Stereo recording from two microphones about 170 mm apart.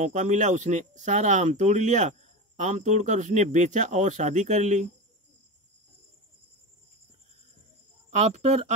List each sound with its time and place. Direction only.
0.0 s speech: 45° right (ahead or behind)
8.1 s speech: 40° right (ahead or behind)